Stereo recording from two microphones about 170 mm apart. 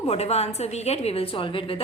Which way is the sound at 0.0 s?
40° left (ahead or behind).